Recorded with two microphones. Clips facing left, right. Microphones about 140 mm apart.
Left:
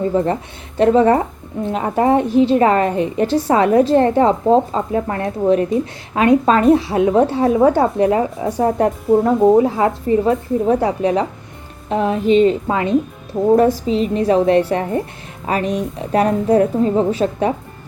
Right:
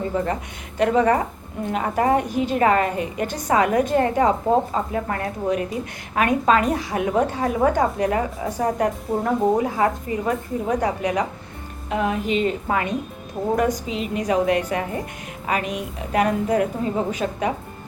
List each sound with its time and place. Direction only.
0.1 s a woman's voice: 30° left (ahead or behind)